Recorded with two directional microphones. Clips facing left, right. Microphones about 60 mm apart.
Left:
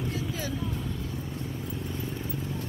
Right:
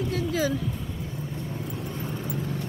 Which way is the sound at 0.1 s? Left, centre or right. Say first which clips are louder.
Right 7 dB; right.